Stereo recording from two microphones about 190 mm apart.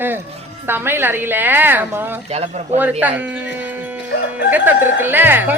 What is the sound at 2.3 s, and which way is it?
Speech, 35° right (ahead or behind).